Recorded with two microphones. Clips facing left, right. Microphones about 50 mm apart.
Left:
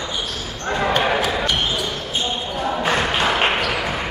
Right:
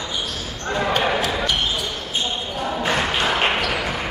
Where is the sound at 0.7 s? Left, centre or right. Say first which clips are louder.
Left 1 dB; centre.